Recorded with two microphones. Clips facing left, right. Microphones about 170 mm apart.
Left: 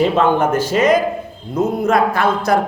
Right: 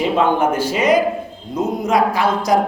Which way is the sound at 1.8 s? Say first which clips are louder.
Even; 55° left (ahead or behind).